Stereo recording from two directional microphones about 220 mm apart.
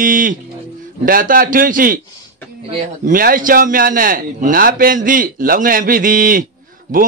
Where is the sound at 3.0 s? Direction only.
40° right (ahead or behind).